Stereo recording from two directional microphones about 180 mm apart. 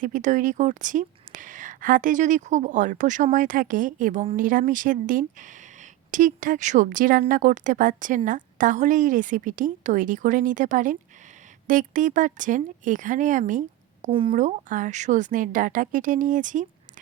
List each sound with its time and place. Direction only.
0.0 s speech: 45° right (ahead or behind)
13.5 s a sound: 45° right (ahead or behind)
14.1 s speech: 30° right (ahead or behind)
14.3 s speech: 45° right (ahead or behind)